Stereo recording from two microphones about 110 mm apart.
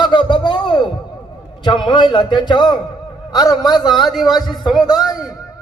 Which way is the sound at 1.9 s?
45° left (ahead or behind).